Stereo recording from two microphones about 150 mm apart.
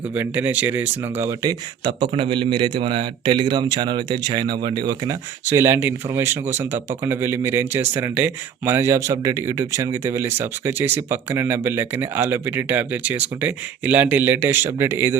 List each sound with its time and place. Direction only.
0.1 s a man's voice: 10° right (ahead or behind)